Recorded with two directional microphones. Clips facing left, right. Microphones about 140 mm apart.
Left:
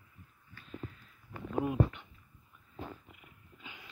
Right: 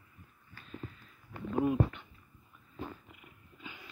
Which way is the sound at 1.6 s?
15° left (ahead or behind).